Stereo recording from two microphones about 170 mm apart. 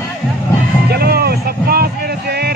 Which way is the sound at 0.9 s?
70° right (ahead or behind).